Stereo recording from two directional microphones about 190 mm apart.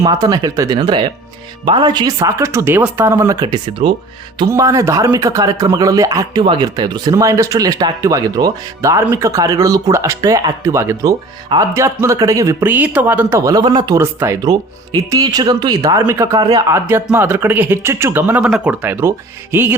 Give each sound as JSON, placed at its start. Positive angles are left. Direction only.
{"t": 0.0, "sound": "speech", "side_deg": -20}